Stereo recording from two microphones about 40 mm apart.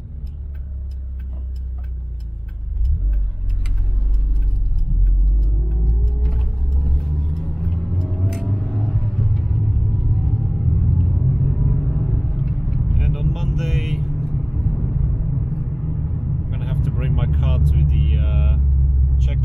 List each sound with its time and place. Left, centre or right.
5.2 s music: centre
5.8 s music: centre
6.1 s vehicle: centre
8.5 s rumble: centre
12.5 s vehicle: centre